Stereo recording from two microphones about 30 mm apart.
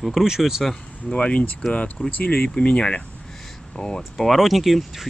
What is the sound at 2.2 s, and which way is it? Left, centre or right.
Speech, left.